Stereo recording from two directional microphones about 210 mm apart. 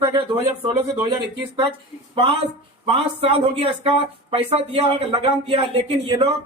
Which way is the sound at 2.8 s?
25° right (ahead or behind).